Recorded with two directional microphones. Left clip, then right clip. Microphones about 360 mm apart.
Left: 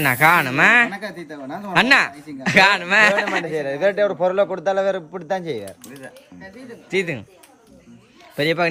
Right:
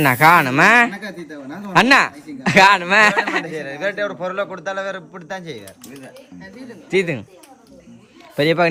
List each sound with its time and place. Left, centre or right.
0.0 s a man's voice: centre
3.5 s a man's voice: left
6.9 s a man's voice: centre
8.4 s a man's voice: centre